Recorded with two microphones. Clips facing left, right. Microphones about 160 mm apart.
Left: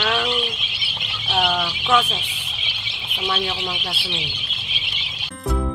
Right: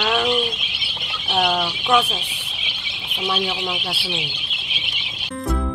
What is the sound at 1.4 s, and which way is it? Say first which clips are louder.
Speech: right 2 dB; 15° right (ahead or behind).